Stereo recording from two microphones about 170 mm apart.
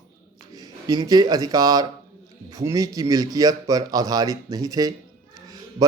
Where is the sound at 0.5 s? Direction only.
20° right (ahead or behind).